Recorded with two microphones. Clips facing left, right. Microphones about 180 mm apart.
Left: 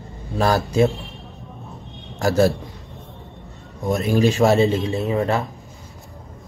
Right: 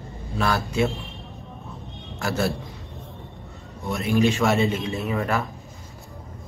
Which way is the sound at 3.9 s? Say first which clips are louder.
Left 3 dB; 40° left (ahead or behind).